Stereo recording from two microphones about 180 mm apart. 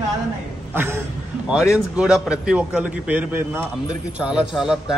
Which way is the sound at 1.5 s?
5° right (ahead or behind).